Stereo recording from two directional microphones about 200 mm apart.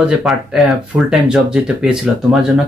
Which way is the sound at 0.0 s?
5° right (ahead or behind).